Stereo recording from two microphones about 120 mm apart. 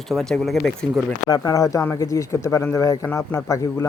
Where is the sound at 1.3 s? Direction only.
25° left (ahead or behind).